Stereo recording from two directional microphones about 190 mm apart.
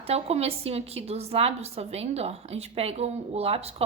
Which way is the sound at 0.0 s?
35° right (ahead or behind).